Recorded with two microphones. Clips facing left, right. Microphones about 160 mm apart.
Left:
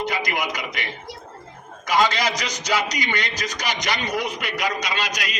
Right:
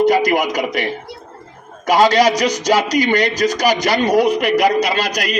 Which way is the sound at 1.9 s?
40° right (ahead or behind).